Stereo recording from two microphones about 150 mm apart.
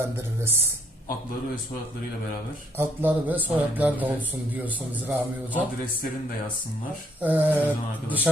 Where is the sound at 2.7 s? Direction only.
15° right (ahead or behind).